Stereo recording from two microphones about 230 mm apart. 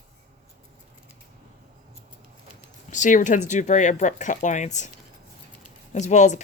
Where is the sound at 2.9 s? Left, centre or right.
Left.